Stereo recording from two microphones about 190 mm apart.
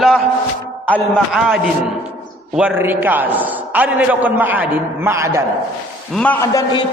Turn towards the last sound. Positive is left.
turn(degrees=25)  # may be behind; listen again after turning